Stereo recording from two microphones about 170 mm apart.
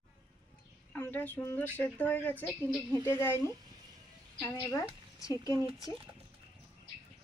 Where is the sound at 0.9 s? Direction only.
10° left (ahead or behind).